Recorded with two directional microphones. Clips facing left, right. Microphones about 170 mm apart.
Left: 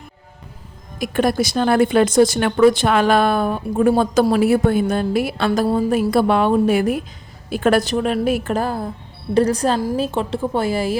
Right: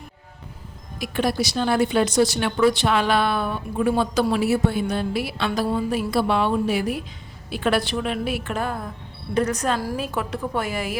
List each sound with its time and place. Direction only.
0.9 s a woman's voice: 50° left (ahead or behind); by 10.9 s 30° left (ahead or behind)